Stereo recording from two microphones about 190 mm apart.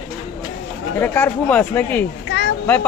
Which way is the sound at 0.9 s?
10° left (ahead or behind).